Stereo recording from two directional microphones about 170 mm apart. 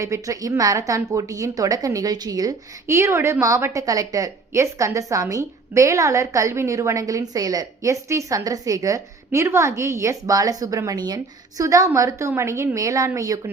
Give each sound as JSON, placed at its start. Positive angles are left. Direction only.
{"t": 0.0, "sound": "a woman's voice", "side_deg": -20}